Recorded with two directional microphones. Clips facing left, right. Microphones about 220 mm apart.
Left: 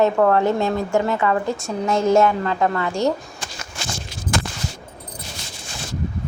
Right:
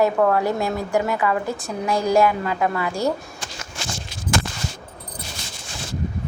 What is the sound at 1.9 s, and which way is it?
Speech, 25° left (ahead or behind).